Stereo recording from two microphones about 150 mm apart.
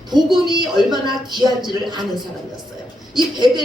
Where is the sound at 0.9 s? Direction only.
30° right (ahead or behind).